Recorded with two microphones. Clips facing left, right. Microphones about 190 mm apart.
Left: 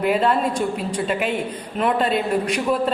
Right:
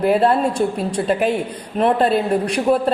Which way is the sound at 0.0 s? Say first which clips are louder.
Right 4 dB; 35° right (ahead or behind).